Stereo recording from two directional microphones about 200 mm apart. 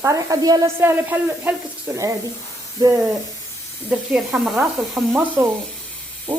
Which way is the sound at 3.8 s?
5° right (ahead or behind).